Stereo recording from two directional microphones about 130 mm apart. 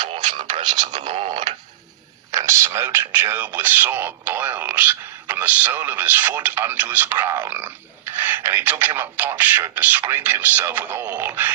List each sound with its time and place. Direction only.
0.3 s speech: 35° right (ahead or behind)
2.3 s speech: 25° right (ahead or behind)